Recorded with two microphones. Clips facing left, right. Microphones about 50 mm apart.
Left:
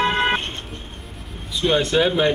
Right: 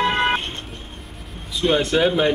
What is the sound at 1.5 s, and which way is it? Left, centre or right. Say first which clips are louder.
Speech: even; centre.